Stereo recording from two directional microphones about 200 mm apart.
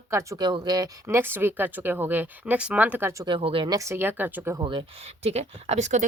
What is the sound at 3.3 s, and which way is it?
Speech, 25° right (ahead or behind).